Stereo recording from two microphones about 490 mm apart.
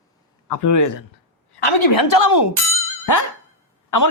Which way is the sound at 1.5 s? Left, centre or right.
Left.